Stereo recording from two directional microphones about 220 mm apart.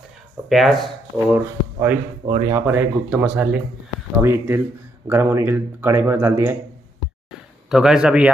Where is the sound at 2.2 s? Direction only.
25° right (ahead or behind).